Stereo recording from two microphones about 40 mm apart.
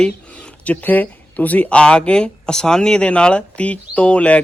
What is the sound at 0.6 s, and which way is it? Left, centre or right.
Speech, left.